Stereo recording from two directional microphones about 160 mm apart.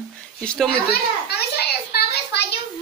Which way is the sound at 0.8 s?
90° left.